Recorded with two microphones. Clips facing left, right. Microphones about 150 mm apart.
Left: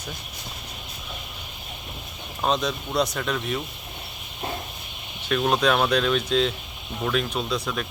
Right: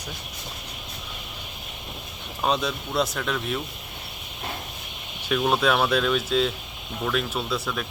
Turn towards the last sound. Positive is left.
turn(degrees=-5)  # may be behind; listen again after turning